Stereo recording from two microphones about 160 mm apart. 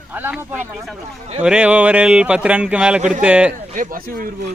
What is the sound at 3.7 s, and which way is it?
Speech, 60° right (ahead or behind).